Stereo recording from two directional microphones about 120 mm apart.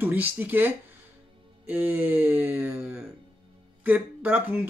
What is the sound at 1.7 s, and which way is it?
Speech, 15° right (ahead or behind).